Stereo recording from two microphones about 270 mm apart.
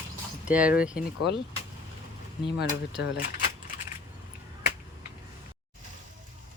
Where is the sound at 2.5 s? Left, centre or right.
Left.